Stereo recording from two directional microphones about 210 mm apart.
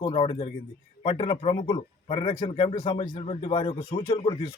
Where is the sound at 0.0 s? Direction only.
25° left (ahead or behind).